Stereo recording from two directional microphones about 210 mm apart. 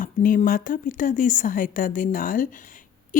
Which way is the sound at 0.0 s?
40° left (ahead or behind).